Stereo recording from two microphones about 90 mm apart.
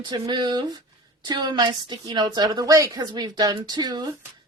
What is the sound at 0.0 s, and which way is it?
A woman's voice, 55° right (ahead or behind).